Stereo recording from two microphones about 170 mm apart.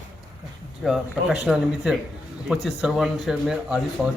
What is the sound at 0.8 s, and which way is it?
Speech, centre (ahead or behind).